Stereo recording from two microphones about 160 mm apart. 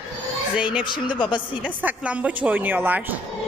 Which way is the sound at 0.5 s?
5° right (ahead or behind).